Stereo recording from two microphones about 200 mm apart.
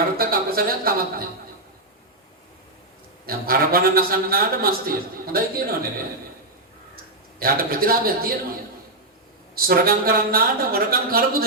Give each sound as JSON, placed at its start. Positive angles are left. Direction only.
{"t": 0.2, "sound": "a man's voice", "side_deg": -45}
{"t": 3.2, "sound": "a man's voice", "side_deg": -50}
{"t": 6.9, "sound": "speech", "side_deg": -45}
{"t": 9.6, "sound": "a man's voice", "side_deg": -50}